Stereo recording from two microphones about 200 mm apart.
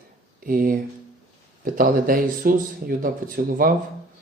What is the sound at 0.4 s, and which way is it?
Speech, 45° right (ahead or behind).